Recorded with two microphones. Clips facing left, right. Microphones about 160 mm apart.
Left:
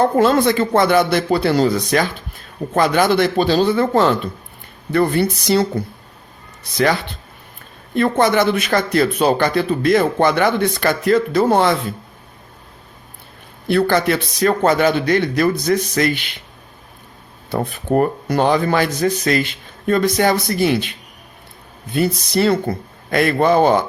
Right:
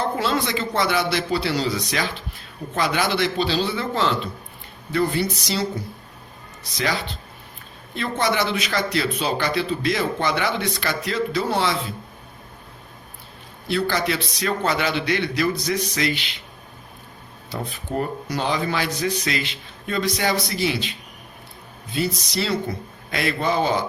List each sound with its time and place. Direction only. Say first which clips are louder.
0.0 s a man's voice: left 9 dB; 50° left (ahead or behind)
13.7 s a man's voice: left 7 dB; 55° left (ahead or behind)
17.5 s a man's voice: left 10 dB; 55° left (ahead or behind)
21.9 s a man's voice: left 7 dB; 55° left (ahead or behind)